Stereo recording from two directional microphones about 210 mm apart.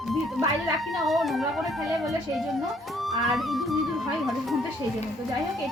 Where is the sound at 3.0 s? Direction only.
Centre (ahead or behind).